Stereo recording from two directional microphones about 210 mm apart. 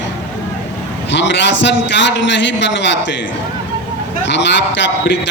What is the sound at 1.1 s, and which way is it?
A man's voice, 60° left (ahead or behind).